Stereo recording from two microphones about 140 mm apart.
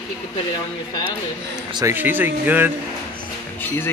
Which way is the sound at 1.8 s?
15° right (ahead or behind).